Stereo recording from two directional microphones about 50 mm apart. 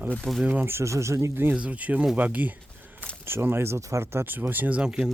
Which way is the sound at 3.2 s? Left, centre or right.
Right.